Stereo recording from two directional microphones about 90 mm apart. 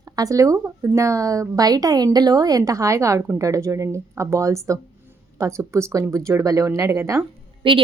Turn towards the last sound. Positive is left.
turn(degrees=-75)  # may be behind; listen again after turning